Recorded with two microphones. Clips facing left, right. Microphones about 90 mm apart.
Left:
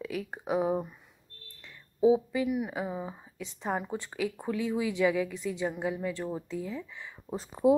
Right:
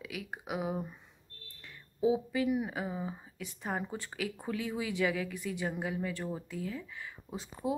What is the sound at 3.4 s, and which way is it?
Speech, 20° left (ahead or behind).